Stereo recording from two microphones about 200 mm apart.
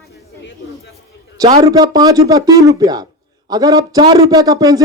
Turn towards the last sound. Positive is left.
turn(degrees=-15)  # may be behind; listen again after turning